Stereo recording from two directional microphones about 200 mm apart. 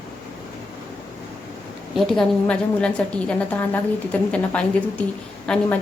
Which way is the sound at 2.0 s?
Centre (ahead or behind).